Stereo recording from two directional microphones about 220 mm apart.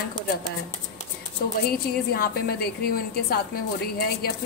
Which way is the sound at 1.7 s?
45° left (ahead or behind).